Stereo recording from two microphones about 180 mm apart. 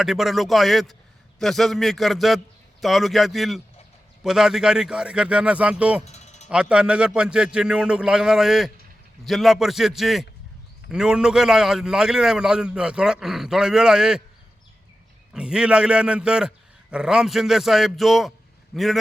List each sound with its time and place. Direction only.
0.0 s a man's voice: centre (ahead or behind)
6.1 s a sound: 40° left (ahead or behind)
6.5 s a man's voice: 5° right (ahead or behind)
15.3 s a man's voice: 5° right (ahead or behind)